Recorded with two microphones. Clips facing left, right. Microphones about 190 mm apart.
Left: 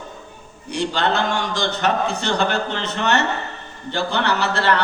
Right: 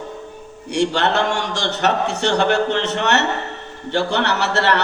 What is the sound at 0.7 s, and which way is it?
A man's voice, 75° right (ahead or behind).